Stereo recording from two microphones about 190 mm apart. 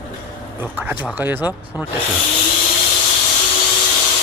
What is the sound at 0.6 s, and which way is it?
Speech, 10° right (ahead or behind).